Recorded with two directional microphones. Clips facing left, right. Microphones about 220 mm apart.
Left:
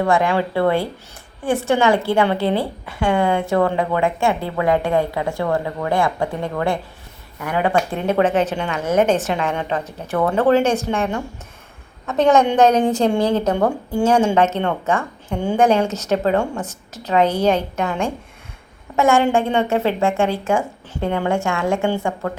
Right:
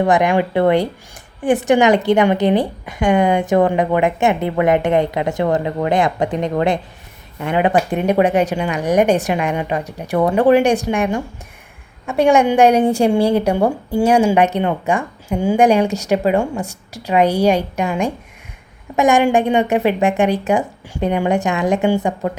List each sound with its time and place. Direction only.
0.0 s a woman's voice: 20° right (ahead or behind)